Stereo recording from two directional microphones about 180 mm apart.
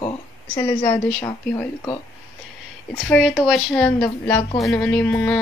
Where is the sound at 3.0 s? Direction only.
5° left (ahead or behind).